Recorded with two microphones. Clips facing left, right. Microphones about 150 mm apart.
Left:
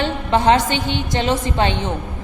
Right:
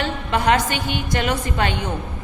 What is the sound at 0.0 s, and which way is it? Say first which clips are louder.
A woman's voice: left 4 dB; 25° left (ahead or behind).